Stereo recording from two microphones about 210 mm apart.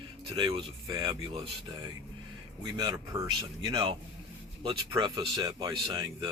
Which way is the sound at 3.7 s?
20° right (ahead or behind).